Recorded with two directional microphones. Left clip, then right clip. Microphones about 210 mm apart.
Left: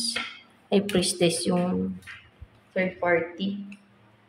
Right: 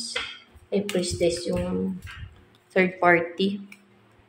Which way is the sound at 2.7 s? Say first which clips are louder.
Right 4 dB; 25° right (ahead or behind).